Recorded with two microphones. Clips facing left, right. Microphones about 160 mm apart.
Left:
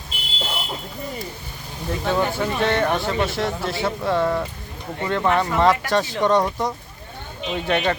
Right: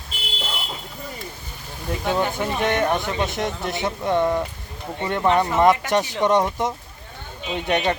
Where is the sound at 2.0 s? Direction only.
15° right (ahead or behind).